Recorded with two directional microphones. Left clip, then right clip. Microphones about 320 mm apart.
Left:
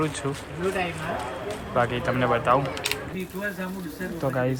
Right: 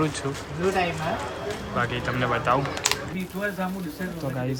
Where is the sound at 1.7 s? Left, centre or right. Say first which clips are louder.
Left 3 dB; centre.